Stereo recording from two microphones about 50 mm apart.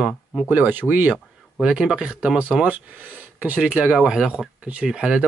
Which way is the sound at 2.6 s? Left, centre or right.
Right.